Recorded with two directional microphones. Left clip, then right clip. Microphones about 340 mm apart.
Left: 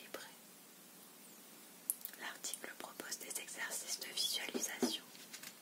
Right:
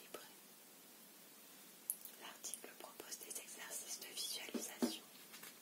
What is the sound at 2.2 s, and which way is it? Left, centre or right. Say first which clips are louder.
Whispering: left 7 dB; centre.